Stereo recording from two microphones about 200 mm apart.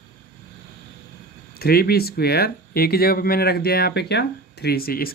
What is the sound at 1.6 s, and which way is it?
Speech, 50° left (ahead or behind).